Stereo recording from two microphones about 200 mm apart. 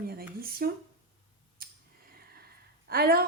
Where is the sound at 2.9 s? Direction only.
50° right (ahead or behind).